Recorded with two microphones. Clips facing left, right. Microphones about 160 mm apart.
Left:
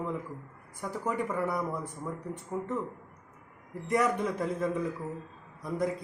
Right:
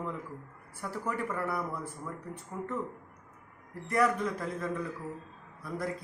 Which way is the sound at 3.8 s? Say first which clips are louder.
Left 1 dB; 20° left (ahead or behind).